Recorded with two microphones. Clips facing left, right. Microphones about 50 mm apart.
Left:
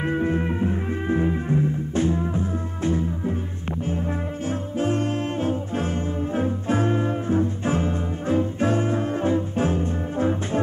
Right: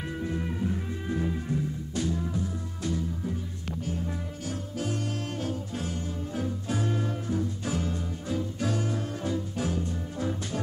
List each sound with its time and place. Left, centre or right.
0.0 s music: left